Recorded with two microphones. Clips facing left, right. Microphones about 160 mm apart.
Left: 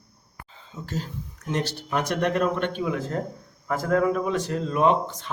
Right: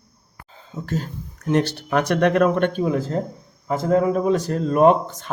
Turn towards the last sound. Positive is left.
turn(degrees=-45)  # may be behind; listen again after turning